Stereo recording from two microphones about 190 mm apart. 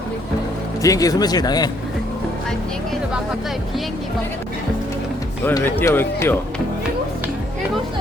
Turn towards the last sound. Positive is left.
turn(degrees=10)  # may be behind; listen again after turning